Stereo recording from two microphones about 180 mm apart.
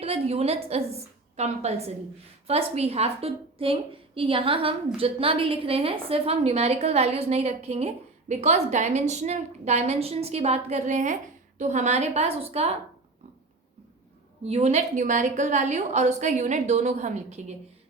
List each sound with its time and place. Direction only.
0.0 s a woman's voice: 35° right (ahead or behind)
14.4 s a woman's voice: 35° right (ahead or behind)